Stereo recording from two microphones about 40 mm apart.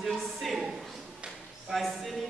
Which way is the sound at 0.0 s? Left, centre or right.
Centre.